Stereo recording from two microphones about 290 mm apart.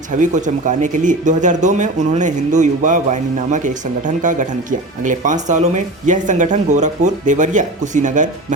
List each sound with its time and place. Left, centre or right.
0.1 s speech: right